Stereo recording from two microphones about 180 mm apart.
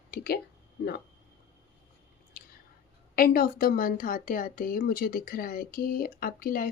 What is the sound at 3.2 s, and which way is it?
Speech, 55° left (ahead or behind).